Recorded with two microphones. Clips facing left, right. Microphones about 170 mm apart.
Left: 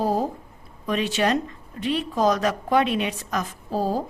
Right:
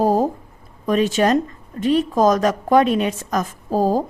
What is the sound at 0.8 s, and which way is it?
A woman's voice, 45° right (ahead or behind).